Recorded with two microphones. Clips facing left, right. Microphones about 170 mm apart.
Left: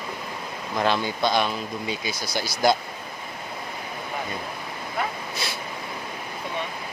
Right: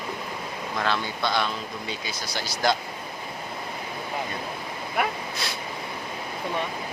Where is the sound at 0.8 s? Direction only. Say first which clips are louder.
Left 4 dB; 15° left (ahead or behind).